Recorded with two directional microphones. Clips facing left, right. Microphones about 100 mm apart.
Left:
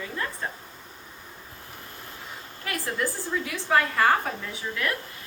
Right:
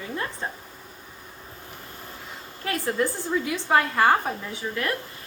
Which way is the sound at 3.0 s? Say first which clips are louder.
Right 3 dB; 25° right (ahead or behind).